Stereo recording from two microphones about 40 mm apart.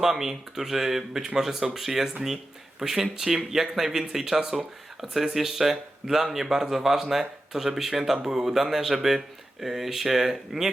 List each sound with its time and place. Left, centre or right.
0.0 s speech: centre